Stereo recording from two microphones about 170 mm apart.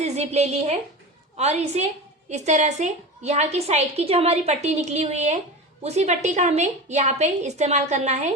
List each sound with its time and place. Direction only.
0.0 s a woman's voice: 40° right (ahead or behind)